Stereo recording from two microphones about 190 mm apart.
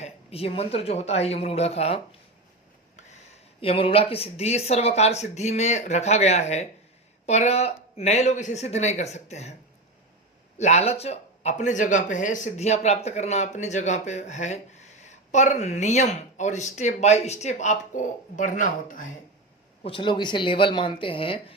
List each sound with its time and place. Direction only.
0.0 s speech: 30° left (ahead or behind)
10.6 s speech: 35° left (ahead or behind)
19.8 s speech: 25° left (ahead or behind)